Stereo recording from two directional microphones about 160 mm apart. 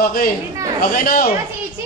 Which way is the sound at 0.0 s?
70° left (ahead or behind).